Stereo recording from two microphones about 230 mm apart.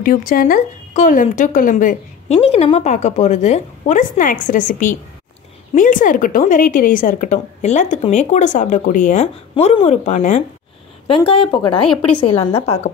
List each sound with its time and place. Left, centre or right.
0.0 s speech: left